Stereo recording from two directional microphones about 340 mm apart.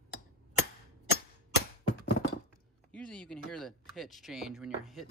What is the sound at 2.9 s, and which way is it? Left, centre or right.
Speech, centre.